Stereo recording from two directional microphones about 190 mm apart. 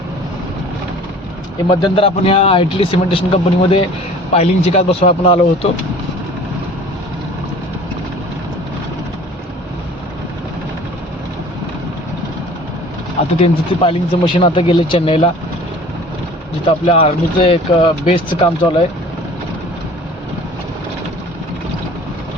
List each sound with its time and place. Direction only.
1.7 s speech: 25° left (ahead or behind)
13.4 s speech: 30° left (ahead or behind)
16.6 s speech: 30° left (ahead or behind)